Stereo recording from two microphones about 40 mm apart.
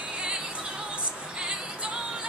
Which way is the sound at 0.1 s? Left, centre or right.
Right.